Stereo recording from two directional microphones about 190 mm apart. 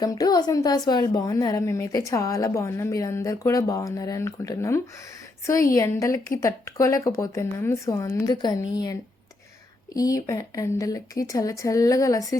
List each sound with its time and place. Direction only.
0.0 s a woman's voice: 20° left (ahead or behind)